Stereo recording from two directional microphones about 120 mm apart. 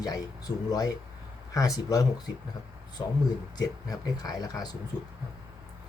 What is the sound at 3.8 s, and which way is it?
Speech, 35° left (ahead or behind).